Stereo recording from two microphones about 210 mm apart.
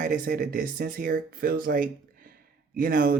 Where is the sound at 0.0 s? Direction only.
40° right (ahead or behind).